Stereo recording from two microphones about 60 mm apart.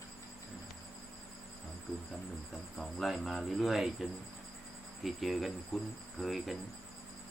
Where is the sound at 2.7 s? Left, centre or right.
Centre.